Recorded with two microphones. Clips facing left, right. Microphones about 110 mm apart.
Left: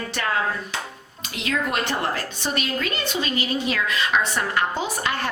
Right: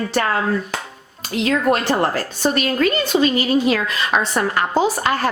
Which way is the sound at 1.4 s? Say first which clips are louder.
Right 7 dB; 40° right (ahead or behind).